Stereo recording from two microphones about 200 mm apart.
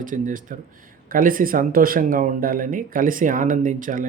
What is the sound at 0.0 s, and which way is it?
Speech, 40° right (ahead or behind).